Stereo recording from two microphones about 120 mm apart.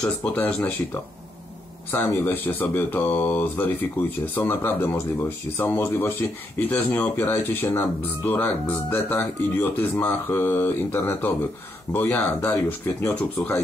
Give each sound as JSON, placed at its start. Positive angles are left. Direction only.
{"t": 0.0, "sound": "speech", "side_deg": 10}
{"t": 1.9, "sound": "speech", "side_deg": 20}